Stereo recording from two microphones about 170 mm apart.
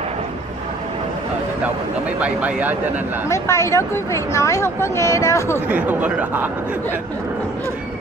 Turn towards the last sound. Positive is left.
turn(degrees=-10)  # may be behind; listen again after turning